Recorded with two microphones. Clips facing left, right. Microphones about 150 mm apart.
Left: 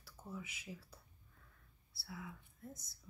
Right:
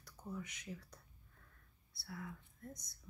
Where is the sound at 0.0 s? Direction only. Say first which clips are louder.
Right 2 dB; 5° left (ahead or behind).